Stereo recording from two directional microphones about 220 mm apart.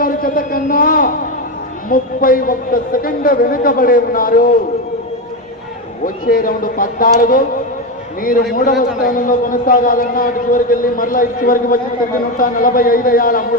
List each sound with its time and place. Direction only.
0.0 s a man's voice: 40° left (ahead or behind)
6.0 s a man's voice: 40° left (ahead or behind)